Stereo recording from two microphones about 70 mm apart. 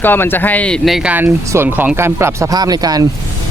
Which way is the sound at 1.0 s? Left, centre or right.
Right.